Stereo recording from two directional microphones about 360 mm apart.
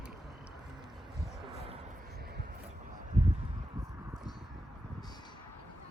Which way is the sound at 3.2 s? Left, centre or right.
Centre.